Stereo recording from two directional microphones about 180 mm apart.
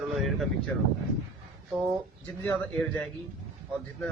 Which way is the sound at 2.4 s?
5° left (ahead or behind).